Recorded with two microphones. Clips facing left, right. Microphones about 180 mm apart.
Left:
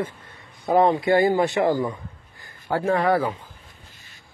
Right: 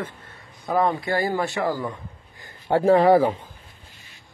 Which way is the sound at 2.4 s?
30° right (ahead or behind).